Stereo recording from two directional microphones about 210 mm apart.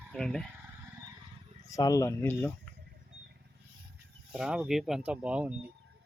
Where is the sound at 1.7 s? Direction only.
15° left (ahead or behind).